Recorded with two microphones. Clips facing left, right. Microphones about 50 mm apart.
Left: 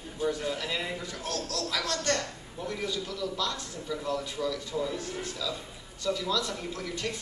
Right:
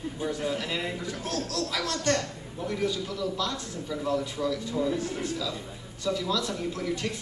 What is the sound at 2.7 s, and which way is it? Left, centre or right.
Speech, centre.